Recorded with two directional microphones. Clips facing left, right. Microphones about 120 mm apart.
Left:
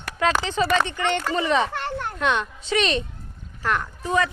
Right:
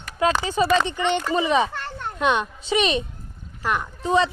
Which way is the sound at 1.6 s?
70° left (ahead or behind).